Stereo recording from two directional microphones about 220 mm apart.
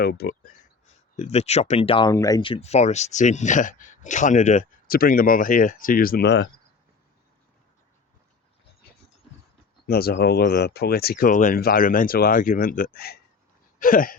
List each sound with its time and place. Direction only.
0.0 s speech: 45° left (ahead or behind)
1.1 s speech: 30° left (ahead or behind); by 6.5 s 50° left (ahead or behind)
9.8 s speech: 45° left (ahead or behind)
13.7 s a sound: 40° left (ahead or behind)